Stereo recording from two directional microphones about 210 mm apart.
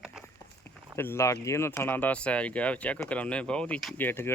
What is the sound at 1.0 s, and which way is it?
Speech, 10° left (ahead or behind).